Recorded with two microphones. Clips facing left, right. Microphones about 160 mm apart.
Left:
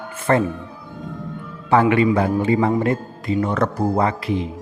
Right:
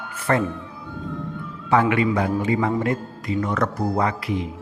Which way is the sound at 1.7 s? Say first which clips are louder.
Left 3 dB; 30° left (ahead or behind).